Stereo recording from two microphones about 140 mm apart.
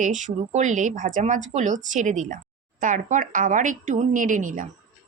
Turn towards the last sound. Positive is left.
turn(degrees=-70)  # may be behind; listen again after turning